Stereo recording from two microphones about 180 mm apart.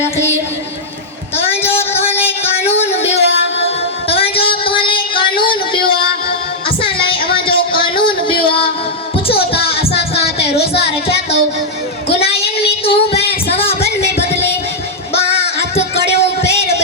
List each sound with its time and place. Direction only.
1.7 s music: 35° left (ahead or behind)
2.1 s music: 10° left (ahead or behind)
2.7 s music: 35° left (ahead or behind)
4.1 s child singing: 30° left (ahead or behind)
6.8 s a sound: 30° left (ahead or behind)
8.4 s music: 30° left (ahead or behind)
12.0 s a sound: 35° left (ahead or behind)
12.6 s child singing: 30° left (ahead or behind)
13.8 s music: 35° left (ahead or behind)